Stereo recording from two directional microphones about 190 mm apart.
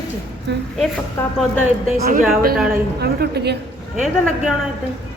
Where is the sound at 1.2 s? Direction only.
10° left (ahead or behind).